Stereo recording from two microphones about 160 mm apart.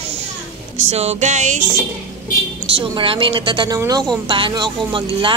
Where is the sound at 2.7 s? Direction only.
35° right (ahead or behind).